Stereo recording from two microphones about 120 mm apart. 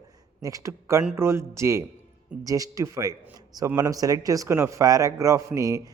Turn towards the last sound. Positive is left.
turn(degrees=-25)  # may be behind; listen again after turning